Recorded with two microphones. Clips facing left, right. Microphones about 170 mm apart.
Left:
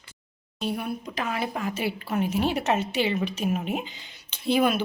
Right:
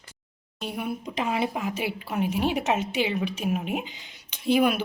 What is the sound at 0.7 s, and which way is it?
Speech, 15° right (ahead or behind).